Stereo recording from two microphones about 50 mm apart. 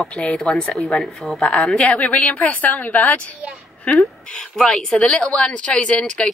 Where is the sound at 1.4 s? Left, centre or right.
Left.